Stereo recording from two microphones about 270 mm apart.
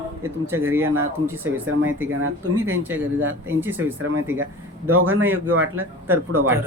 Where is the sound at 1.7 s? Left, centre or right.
Right.